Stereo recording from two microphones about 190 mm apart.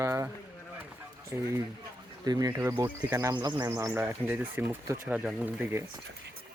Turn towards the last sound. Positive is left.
turn(degrees=-10)  # may be behind; listen again after turning